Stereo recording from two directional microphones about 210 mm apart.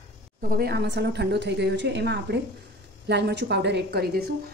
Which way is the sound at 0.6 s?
50° right (ahead or behind).